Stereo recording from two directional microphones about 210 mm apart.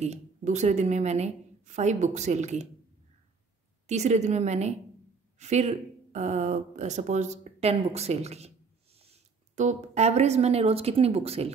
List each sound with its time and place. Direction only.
0.0 s speech: 35° right (ahead or behind)
3.8 s speech: 30° right (ahead or behind)